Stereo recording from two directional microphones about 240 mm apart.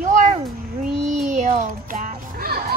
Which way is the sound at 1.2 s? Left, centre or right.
Right.